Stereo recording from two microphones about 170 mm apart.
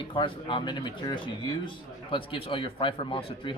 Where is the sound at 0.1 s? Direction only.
30° left (ahead or behind).